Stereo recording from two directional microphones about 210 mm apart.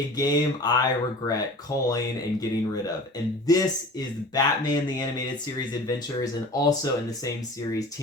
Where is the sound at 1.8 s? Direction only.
15° left (ahead or behind).